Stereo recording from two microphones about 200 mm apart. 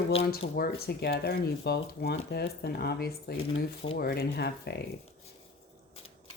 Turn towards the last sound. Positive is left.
turn(degrees=55)  # may be behind; listen again after turning